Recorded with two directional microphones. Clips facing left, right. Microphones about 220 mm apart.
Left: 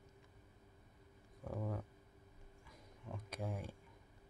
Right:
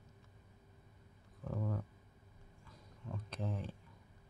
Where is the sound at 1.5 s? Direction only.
10° left (ahead or behind).